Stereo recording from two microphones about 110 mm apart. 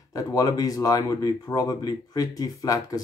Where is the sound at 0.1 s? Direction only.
35° left (ahead or behind).